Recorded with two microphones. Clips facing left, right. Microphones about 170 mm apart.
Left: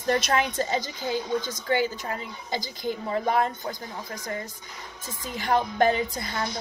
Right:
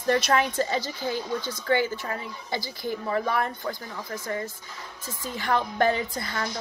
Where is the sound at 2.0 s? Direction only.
20° left (ahead or behind).